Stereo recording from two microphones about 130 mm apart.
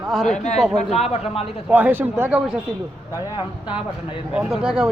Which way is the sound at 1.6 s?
15° right (ahead or behind).